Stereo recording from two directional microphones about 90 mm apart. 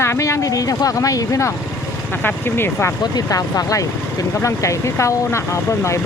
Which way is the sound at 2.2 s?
25° left (ahead or behind).